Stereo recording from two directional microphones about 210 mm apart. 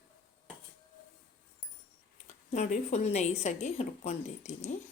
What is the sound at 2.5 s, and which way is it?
A woman's voice, 35° left (ahead or behind).